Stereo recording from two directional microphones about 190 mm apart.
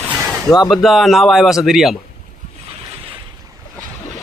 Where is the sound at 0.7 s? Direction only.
Centre (ahead or behind).